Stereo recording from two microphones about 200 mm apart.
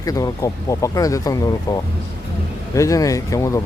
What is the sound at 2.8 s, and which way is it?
Speech, 15° left (ahead or behind).